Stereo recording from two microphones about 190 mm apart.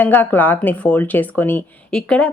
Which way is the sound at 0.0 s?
10° left (ahead or behind).